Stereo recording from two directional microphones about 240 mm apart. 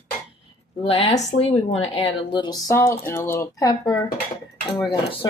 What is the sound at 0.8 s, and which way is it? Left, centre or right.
Speech, left.